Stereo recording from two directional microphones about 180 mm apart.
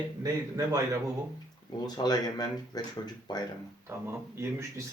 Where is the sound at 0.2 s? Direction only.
20° right (ahead or behind).